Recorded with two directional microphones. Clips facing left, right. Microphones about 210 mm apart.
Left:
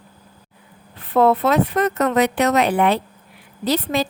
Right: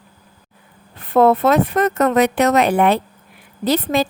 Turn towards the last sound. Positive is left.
turn(degrees=-50)  # may be behind; listen again after turning